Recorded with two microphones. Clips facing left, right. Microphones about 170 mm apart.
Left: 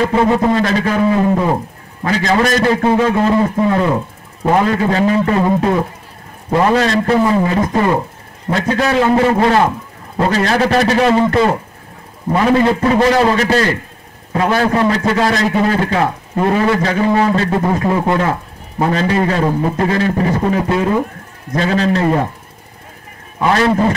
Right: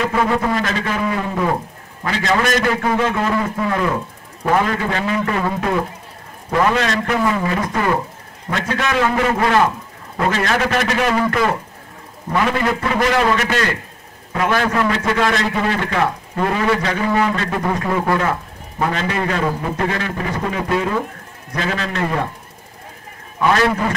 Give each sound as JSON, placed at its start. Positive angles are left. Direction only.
{"t": 0.0, "sound": "music", "side_deg": 25}
{"t": 2.0, "sound": "a man's voice", "side_deg": 40}
{"t": 8.5, "sound": "a man's voice", "side_deg": 35}
{"t": 9.0, "sound": "music", "side_deg": 30}
{"t": 10.1, "sound": "a man's voice", "side_deg": 35}
{"t": 23.5, "sound": "music", "side_deg": 25}